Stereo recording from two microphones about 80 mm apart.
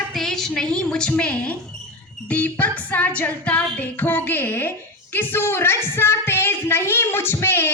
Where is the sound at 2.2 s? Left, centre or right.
Centre.